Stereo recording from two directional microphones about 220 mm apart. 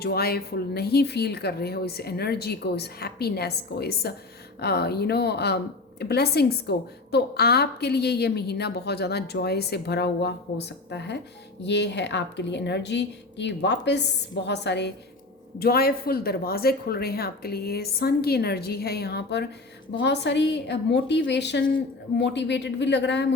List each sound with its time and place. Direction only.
0.0 s a woman's voice: 45° left (ahead or behind)